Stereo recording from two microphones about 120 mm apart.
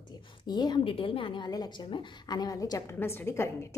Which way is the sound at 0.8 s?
45° left (ahead or behind).